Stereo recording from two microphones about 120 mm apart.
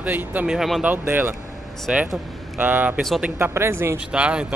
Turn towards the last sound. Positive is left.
turn(degrees=-10)  # may be behind; listen again after turning